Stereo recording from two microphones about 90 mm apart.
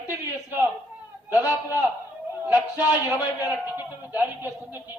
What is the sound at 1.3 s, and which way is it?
Speech, 40° left (ahead or behind).